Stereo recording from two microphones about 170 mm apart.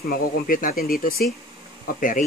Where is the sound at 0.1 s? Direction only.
55° left (ahead or behind).